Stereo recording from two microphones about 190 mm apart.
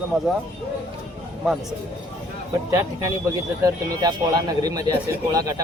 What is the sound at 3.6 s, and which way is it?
Speech, 20° right (ahead or behind).